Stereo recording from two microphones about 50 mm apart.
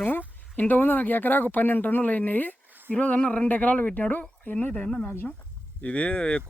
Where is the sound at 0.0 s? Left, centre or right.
Left.